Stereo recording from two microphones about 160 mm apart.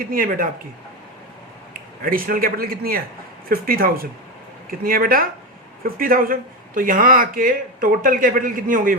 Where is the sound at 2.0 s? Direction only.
60° right (ahead or behind).